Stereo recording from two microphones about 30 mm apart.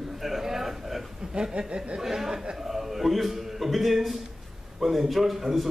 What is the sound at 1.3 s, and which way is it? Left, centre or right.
Speech, right.